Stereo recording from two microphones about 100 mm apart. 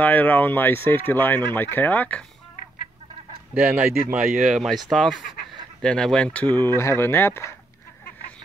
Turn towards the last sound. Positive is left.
turn(degrees=25)  # may be behind; listen again after turning